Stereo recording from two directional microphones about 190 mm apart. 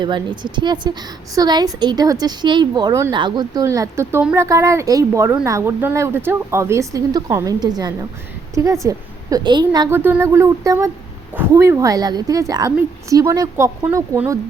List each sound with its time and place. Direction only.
0.0 s a woman's voice: 25° right (ahead or behind)